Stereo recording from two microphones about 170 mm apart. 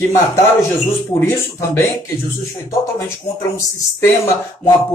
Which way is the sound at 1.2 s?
15° left (ahead or behind).